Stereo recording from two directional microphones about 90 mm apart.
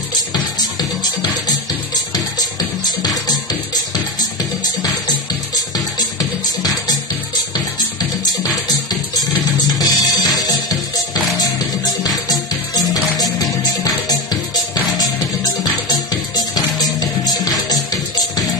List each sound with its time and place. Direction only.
0.1 s music: 50° left (ahead or behind)
5.9 s music: 45° left (ahead or behind)
9.8 s music: 45° left (ahead or behind)